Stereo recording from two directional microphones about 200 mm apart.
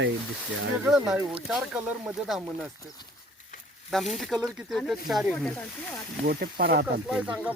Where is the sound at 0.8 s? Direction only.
5° right (ahead or behind).